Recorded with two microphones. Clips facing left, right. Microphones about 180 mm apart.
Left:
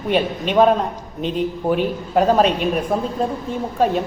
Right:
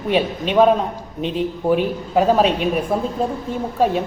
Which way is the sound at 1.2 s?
45° left (ahead or behind).